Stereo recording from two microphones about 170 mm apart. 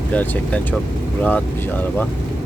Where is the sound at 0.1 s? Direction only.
10° left (ahead or behind).